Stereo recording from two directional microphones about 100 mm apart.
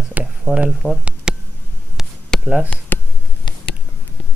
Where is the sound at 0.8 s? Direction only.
20° left (ahead or behind).